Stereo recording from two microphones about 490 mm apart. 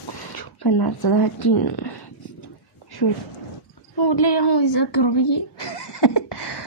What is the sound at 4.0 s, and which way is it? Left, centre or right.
A woman's voice, left.